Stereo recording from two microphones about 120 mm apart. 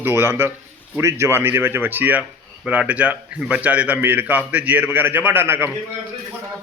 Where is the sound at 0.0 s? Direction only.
20° right (ahead or behind).